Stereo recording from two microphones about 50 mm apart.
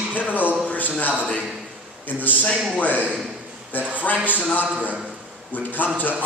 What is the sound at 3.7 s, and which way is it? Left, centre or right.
A man's voice, left.